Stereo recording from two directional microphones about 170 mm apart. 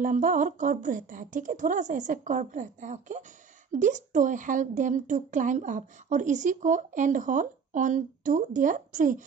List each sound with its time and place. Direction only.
0.0 s speech: 50° right (ahead or behind)